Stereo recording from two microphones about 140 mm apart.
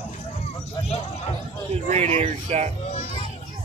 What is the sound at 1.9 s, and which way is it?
Speech, 50° right (ahead or behind).